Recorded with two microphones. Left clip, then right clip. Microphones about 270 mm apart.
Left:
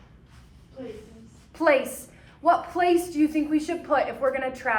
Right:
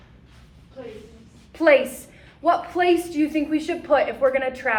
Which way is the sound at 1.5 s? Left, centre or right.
Centre.